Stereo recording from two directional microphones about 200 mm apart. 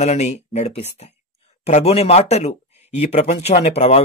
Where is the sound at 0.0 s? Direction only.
35° left (ahead or behind).